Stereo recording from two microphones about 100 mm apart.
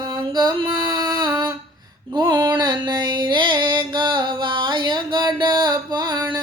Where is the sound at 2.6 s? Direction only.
45° right (ahead or behind).